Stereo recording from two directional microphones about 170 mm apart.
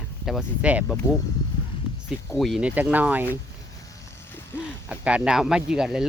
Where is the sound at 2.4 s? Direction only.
5° right (ahead or behind).